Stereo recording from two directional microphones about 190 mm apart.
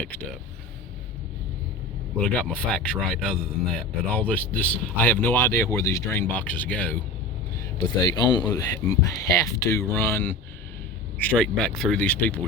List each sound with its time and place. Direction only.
2.2 s speech: 5° left (ahead or behind)
8.0 s speech: 20° left (ahead or behind)